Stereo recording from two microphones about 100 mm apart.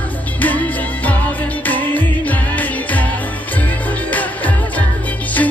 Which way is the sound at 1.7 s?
15° left (ahead or behind).